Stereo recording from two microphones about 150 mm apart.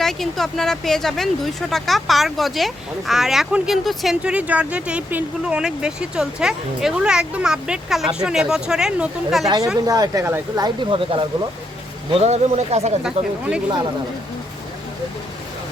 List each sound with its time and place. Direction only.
0.0 s speech: centre (ahead or behind)
9.8 s speech: 25° right (ahead or behind)
10.8 s speech: 35° right (ahead or behind)
13.0 s speech: 5° right (ahead or behind)